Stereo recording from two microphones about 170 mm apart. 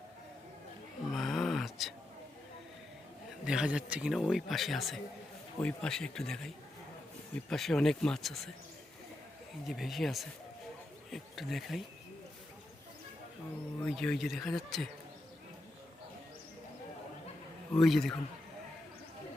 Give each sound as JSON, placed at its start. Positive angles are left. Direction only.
{"t": 1.1, "sound": "a sound", "side_deg": 0}
{"t": 3.4, "sound": "speech", "side_deg": -5}
{"t": 9.6, "sound": "speech", "side_deg": 0}
{"t": 13.8, "sound": "speech", "side_deg": 5}
{"t": 17.7, "sound": "speech", "side_deg": 0}